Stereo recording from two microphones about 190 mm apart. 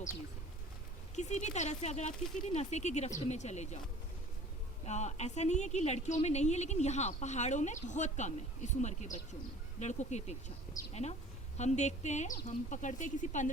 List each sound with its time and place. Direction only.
1.1 s a woman's voice: 35° left (ahead or behind)
4.9 s a woman's voice: 35° left (ahead or behind)
11.5 s a woman's voice: 35° left (ahead or behind)